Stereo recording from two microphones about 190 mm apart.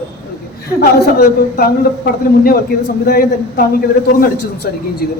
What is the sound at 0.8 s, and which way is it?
Speech, 55° left (ahead or behind).